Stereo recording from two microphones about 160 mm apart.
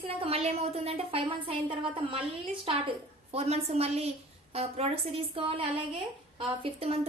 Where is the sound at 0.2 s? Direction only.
40° right (ahead or behind).